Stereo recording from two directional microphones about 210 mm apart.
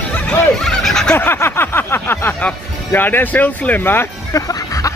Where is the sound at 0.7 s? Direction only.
Centre (ahead or behind).